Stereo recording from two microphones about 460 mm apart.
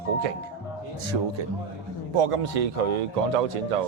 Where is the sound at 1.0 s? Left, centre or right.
Right.